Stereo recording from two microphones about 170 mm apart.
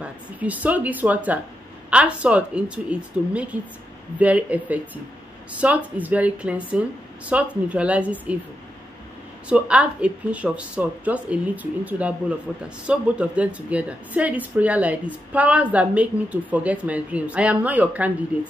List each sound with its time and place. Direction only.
0.0 s speech: 10° right (ahead or behind)
9.5 s speech: 5° right (ahead or behind)